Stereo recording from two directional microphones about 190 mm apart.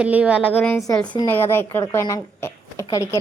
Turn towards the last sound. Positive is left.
turn(degrees=15)  # may be behind; listen again after turning